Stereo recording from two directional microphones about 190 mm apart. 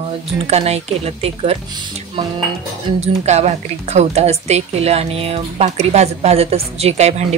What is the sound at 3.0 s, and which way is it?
Speech, 35° right (ahead or behind).